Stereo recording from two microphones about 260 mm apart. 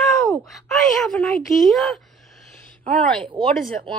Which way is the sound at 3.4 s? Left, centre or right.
Centre.